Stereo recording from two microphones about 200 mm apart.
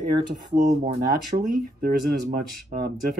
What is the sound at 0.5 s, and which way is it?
Speech, 40° right (ahead or behind).